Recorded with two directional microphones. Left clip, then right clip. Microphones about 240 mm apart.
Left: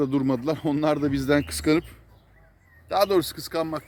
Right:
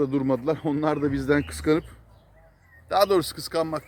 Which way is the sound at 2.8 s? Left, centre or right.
Centre.